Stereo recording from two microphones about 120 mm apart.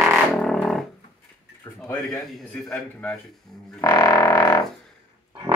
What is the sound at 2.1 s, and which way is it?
A man's voice, 10° left (ahead or behind).